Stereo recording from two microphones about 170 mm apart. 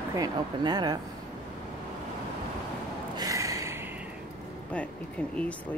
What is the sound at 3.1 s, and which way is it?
Gasp, 20° right (ahead or behind).